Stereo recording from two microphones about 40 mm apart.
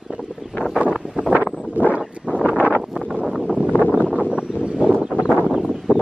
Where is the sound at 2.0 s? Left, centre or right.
Right.